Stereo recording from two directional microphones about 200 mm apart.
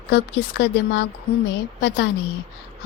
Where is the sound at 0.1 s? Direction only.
60° left (ahead or behind).